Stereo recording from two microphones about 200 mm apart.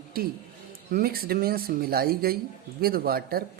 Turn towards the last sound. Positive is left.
turn(degrees=-50)  # may be behind; listen again after turning